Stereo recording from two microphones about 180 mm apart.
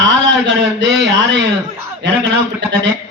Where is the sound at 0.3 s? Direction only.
90° right.